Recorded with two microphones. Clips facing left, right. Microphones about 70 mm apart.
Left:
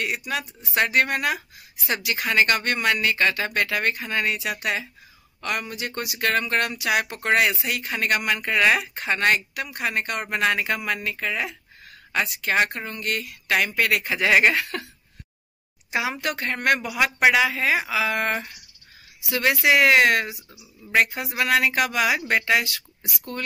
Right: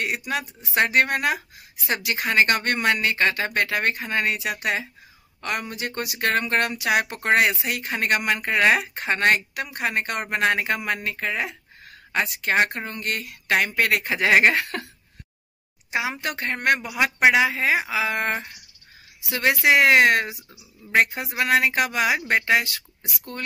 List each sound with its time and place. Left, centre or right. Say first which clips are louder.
0.0 s speech: right 1 dB; right
15.9 s a woman's voice: left 1 dB; right